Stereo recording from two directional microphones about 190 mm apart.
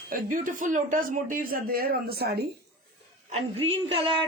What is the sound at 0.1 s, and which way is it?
Speech, 45° right (ahead or behind).